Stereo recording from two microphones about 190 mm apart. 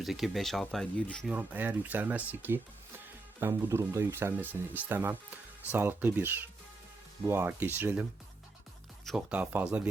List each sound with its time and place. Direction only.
0.0 s speech: centre (ahead or behind)
1.3 s speech: 10° right (ahead or behind)
9.0 s speech: 5° right (ahead or behind)